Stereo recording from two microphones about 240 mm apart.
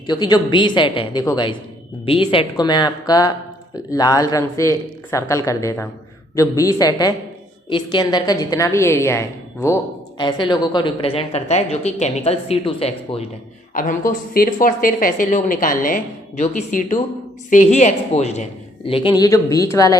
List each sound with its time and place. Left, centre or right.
0.1 s a woman's voice: centre
13.7 s a woman's voice: left; by 20.0 s centre